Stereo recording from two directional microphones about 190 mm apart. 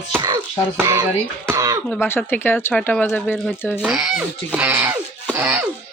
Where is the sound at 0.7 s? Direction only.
15° right (ahead or behind).